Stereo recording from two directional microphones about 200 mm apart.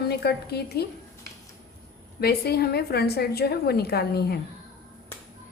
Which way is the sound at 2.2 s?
55° left (ahead or behind).